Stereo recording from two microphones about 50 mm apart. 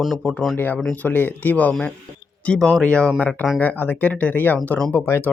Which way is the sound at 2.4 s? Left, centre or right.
Centre.